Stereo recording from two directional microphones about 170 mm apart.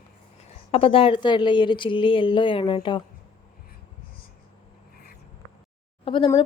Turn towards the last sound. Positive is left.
turn(degrees=30)  # may be behind; listen again after turning